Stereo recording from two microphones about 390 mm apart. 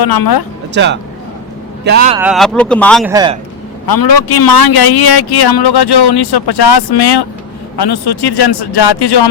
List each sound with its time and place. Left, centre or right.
0.0 s speech: left
0.7 s speech: right
2.1 s speech: centre
3.8 s a man's voice: left